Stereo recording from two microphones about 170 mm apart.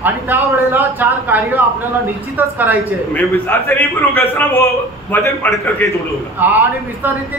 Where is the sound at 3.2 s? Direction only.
10° left (ahead or behind).